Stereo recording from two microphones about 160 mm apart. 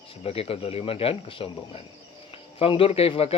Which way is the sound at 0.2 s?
35° left (ahead or behind).